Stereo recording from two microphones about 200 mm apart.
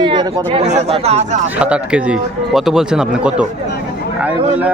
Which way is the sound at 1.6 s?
5° right (ahead or behind).